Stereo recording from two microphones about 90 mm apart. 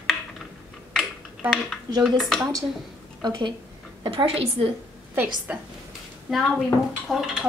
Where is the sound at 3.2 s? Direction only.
60° right (ahead or behind).